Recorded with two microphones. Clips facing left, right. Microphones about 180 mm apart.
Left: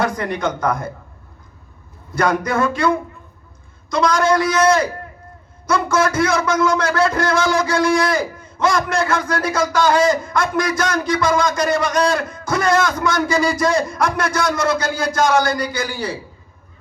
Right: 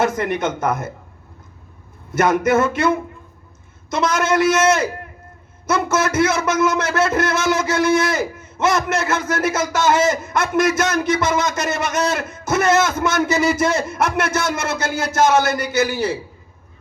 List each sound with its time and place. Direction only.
0.0 s a man's voice: 25° right (ahead or behind)
2.1 s a man's voice: 25° right (ahead or behind)